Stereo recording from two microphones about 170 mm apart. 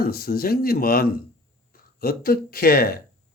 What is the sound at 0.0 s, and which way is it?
Speech, 60° left (ahead or behind).